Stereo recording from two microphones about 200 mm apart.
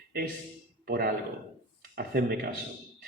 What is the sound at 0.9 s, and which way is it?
A man's voice, 50° right (ahead or behind).